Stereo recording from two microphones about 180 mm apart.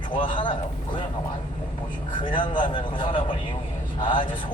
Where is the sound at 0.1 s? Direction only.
25° left (ahead or behind).